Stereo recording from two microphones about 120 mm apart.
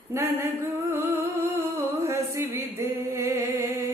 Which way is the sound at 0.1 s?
20° right (ahead or behind).